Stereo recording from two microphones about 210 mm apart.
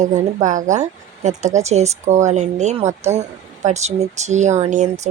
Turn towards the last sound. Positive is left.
turn(degrees=-35)  # may be behind; listen again after turning